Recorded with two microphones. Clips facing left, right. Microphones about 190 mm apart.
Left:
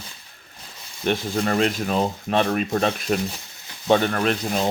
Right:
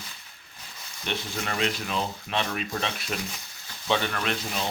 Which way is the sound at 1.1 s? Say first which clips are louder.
Left 9 dB; 45° left (ahead or behind).